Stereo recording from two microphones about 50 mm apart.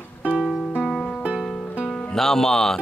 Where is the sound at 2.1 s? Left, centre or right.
Centre.